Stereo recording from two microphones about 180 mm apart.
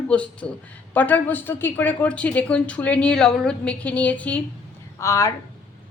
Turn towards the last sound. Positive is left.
turn(degrees=15)  # may be behind; listen again after turning